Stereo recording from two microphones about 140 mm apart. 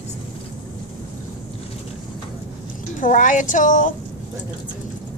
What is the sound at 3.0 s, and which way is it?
Speech, 70° left (ahead or behind).